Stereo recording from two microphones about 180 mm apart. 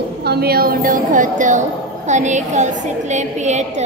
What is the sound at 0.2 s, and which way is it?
A woman's voice, 65° right (ahead or behind).